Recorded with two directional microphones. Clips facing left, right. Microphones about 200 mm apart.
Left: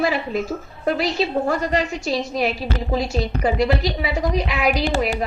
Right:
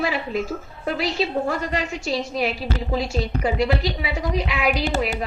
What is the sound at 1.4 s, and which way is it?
A woman's voice, 40° left (ahead or behind).